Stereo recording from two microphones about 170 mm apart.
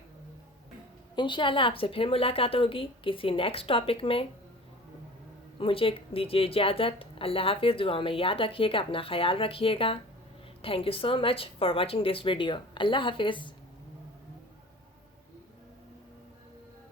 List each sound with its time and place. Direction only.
1.1 s a woman's voice: 25° left (ahead or behind)
5.5 s a woman's voice: 30° left (ahead or behind)